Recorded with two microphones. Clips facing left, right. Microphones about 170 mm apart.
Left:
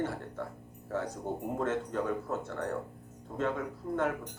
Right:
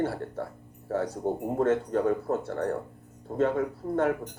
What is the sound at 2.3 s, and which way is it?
Speech, 50° right (ahead or behind).